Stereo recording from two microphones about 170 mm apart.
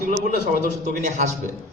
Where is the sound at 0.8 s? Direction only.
45° right (ahead or behind).